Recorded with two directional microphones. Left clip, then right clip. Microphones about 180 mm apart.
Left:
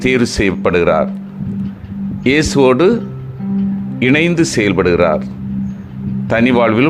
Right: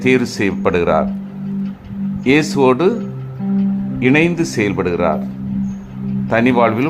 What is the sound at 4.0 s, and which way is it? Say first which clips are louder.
Speech: left 2 dB; 20° left (ahead or behind).